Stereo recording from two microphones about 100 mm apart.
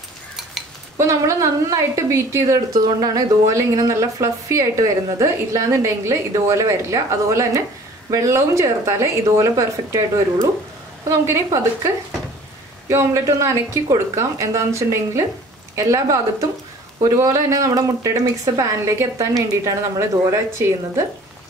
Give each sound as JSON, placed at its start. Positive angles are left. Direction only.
{"t": 0.9, "sound": "a woman's voice", "side_deg": -30}